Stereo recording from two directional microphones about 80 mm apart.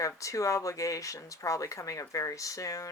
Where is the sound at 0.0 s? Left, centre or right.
Left.